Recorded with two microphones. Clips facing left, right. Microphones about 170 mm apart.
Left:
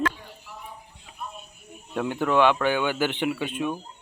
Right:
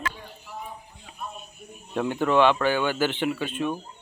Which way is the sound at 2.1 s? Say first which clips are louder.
Right 1 dB; 10° left (ahead or behind).